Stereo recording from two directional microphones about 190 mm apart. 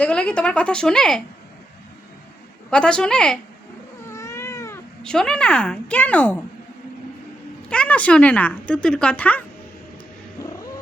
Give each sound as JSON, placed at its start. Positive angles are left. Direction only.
{"t": 0.0, "sound": "a woman's voice", "side_deg": 5}
{"t": 2.6, "sound": "a woman's voice", "side_deg": 5}
{"t": 4.0, "sound": "cat", "side_deg": 15}
{"t": 5.0, "sound": "a woman's voice", "side_deg": 5}
{"t": 7.7, "sound": "speech", "side_deg": 5}
{"t": 10.4, "sound": "cat", "side_deg": 20}